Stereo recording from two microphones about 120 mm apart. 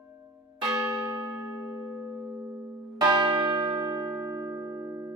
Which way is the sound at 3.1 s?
40° right (ahead or behind).